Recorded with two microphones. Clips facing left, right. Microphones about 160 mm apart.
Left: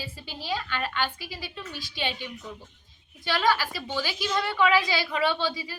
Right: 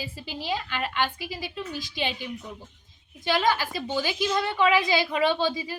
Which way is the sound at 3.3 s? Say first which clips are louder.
Right 1 dB; 20° right (ahead or behind).